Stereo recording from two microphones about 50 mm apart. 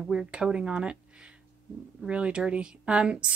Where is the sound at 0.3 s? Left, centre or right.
Centre.